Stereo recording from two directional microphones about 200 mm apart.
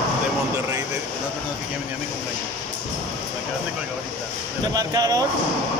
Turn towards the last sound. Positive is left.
turn(degrees=-20)  # may be behind; listen again after turning